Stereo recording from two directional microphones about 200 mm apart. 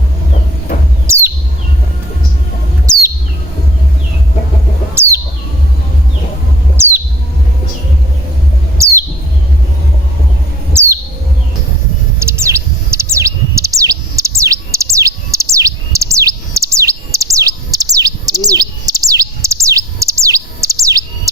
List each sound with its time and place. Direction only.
1.0 s chirp: 10° right (ahead or behind)
4.9 s bird: 15° right (ahead or behind)
8.8 s chirp: 15° right (ahead or behind)
10.7 s bird: 10° right (ahead or behind)
12.2 s bird: 15° right (ahead or behind)